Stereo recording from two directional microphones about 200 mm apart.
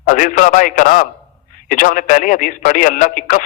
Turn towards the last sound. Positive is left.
turn(degrees=40)  # may be behind; listen again after turning